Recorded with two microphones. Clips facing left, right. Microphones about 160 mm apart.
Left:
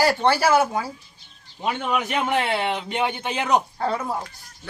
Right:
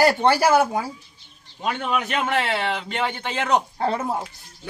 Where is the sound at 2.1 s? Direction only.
15° left (ahead or behind).